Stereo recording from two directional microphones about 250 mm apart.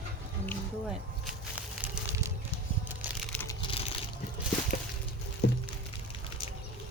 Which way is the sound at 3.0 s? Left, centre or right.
Centre.